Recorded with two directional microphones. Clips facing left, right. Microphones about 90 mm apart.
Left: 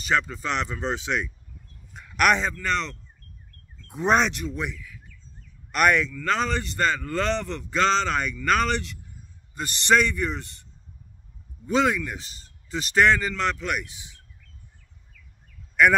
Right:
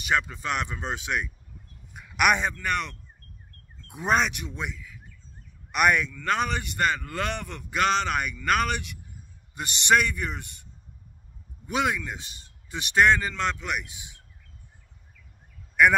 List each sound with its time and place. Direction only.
0.0 s a man's voice: 10° right (ahead or behind)
3.9 s speech: centre (ahead or behind)
4.3 s a man's voice: 15° right (ahead or behind)
15.7 s a sound: 10° right (ahead or behind)